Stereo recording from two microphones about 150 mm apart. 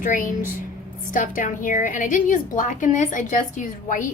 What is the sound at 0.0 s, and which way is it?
A woman's voice, 65° left (ahead or behind).